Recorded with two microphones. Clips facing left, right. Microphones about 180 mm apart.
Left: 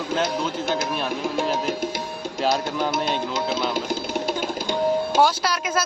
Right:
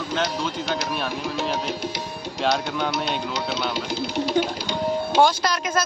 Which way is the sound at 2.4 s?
5° left (ahead or behind).